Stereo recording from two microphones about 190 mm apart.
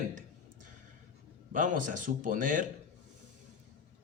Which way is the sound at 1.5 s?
45° right (ahead or behind).